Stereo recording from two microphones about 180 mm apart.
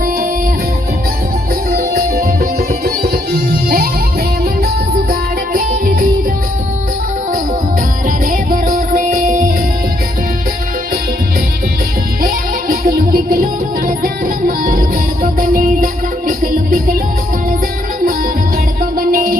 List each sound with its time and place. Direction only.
1.7 s music: 55° right (ahead or behind)
5.5 s music: 50° right (ahead or behind)
8.0 s music: 50° right (ahead or behind)
12.2 s music: 50° right (ahead or behind)
18.8 s music: 50° right (ahead or behind)